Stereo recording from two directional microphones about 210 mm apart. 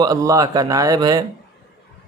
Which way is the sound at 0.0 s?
15° right (ahead or behind).